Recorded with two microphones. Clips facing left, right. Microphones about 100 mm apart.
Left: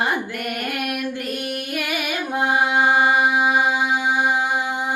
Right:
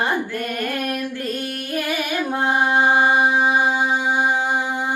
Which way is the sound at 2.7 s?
25° right (ahead or behind).